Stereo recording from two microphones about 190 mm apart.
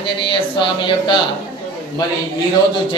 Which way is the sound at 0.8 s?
25° left (ahead or behind).